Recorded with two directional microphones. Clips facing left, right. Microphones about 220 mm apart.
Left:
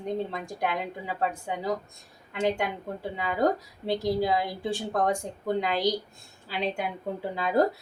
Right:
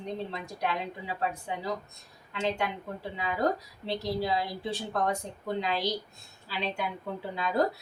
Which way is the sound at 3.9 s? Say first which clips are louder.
Left 5 dB; 50° left (ahead or behind).